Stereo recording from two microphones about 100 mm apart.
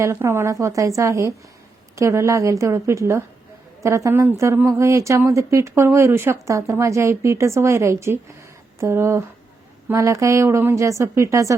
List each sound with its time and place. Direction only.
0.0 s speech: 25° right (ahead or behind)